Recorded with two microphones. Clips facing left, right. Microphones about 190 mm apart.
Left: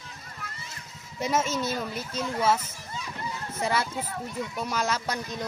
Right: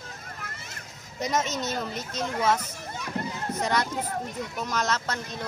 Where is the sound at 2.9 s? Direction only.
60° right (ahead or behind).